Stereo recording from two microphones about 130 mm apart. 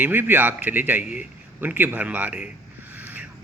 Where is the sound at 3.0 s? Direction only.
10° right (ahead or behind).